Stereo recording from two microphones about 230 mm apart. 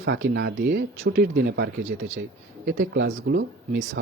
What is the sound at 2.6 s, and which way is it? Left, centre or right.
Speech, right.